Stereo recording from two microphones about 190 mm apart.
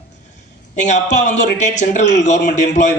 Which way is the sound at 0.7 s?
40° left (ahead or behind).